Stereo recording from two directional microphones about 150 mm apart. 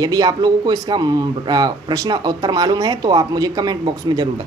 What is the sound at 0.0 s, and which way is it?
Speech, 25° right (ahead or behind).